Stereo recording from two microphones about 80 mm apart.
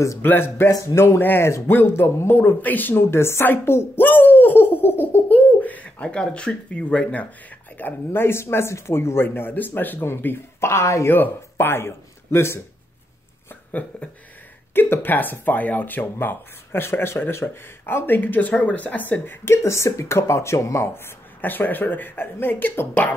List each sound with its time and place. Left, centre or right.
0.2 s speech: left
7.7 s speech: left
13.7 s speech: centre; by 21.0 s left
21.4 s speech: left